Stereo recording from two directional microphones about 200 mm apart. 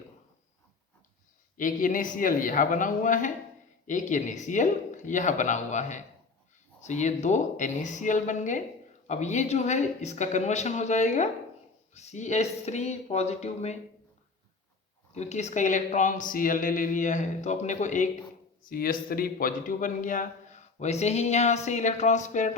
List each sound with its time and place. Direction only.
1.5 s a man's voice: 40° left (ahead or behind)
15.1 s a man's voice: 35° left (ahead or behind)